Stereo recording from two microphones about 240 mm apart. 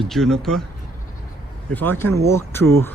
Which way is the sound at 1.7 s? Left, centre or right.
Centre.